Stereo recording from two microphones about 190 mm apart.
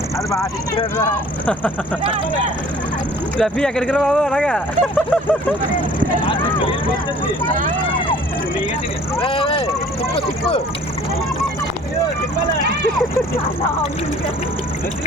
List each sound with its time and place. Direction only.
3.3 s speech: 5° left (ahead or behind)
6.2 s speech: 25° left (ahead or behind)
9.2 s speech: 25° left (ahead or behind)